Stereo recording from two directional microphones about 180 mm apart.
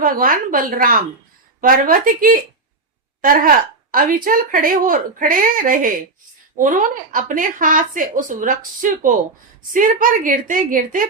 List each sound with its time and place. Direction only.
0.0 s speech: 50° right (ahead or behind)
3.9 s speech: 50° right (ahead or behind)